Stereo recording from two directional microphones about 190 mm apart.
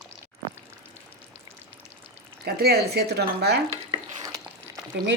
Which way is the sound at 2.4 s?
55° right (ahead or behind).